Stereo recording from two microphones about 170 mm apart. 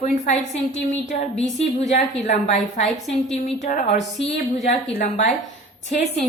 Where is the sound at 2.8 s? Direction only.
Centre (ahead or behind).